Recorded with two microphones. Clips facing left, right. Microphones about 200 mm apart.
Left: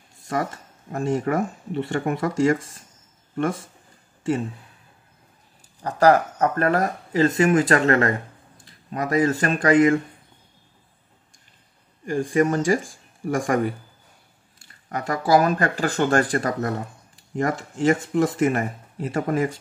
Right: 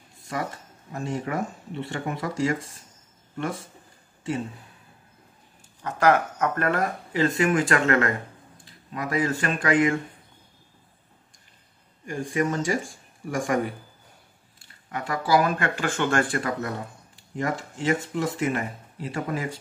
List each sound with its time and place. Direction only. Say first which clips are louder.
0.9 s speech: left 6 dB; 50° left (ahead or behind)
5.8 s speech: left 4 dB; 35° left (ahead or behind)
12.1 s speech: left 6 dB; 50° left (ahead or behind)
14.9 s speech: left 4 dB; 40° left (ahead or behind)